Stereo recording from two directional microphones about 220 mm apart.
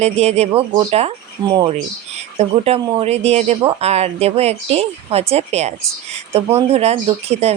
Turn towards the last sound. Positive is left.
turn(degrees=-30)  # may be behind; listen again after turning